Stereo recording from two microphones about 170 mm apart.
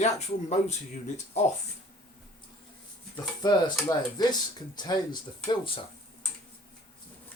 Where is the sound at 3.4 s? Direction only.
25° left (ahead or behind).